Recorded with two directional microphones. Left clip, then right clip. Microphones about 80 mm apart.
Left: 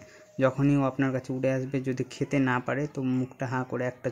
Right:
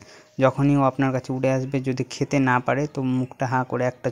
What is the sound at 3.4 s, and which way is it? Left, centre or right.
Speech, right.